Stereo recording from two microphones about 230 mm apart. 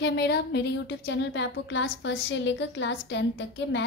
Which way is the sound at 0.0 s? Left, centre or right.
Left.